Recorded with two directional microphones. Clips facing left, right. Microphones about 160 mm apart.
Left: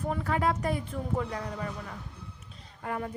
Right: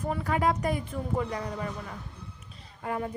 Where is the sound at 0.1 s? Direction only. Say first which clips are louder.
Right 2 dB; 10° right (ahead or behind).